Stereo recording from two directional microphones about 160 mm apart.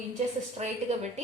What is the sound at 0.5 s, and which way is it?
Speech, 45° right (ahead or behind).